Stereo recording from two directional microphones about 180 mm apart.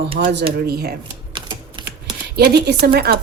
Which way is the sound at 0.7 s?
60° right (ahead or behind).